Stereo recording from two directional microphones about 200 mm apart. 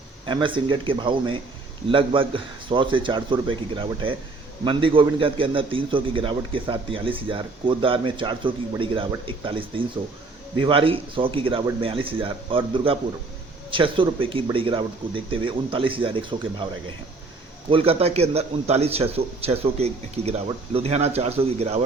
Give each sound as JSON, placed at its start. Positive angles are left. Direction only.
{"t": 0.3, "sound": "a man's voice", "side_deg": -25}
{"t": 17.7, "sound": "a man's voice", "side_deg": -30}